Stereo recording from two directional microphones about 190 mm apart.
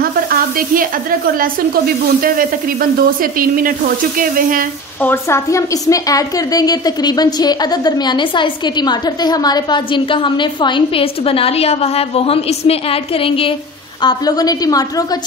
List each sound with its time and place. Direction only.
0.0 s speech: 50° right (ahead or behind)
5.0 s a woman's voice: 10° left (ahead or behind)